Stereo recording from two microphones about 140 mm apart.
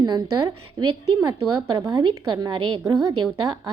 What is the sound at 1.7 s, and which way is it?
A woman's voice, 25° right (ahead or behind).